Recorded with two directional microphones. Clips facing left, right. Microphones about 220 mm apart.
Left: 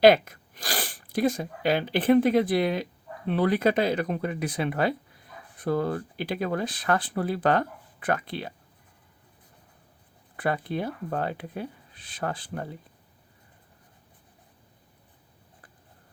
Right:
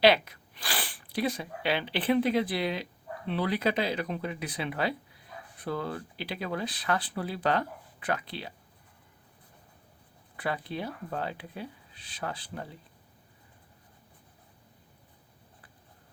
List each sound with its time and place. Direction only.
0.0 s speech: 45° left (ahead or behind)
10.3 s speech: 50° left (ahead or behind)